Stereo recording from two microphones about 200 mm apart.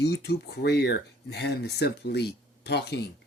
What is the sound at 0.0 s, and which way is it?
Speech, 55° left (ahead or behind).